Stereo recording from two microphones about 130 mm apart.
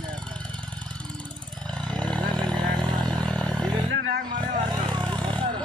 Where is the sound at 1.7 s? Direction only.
5° left (ahead or behind).